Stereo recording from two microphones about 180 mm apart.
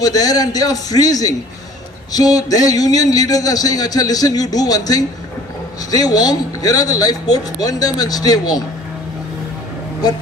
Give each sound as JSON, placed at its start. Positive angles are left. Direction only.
{"t": 0.0, "sound": "a man's voice", "side_deg": 20}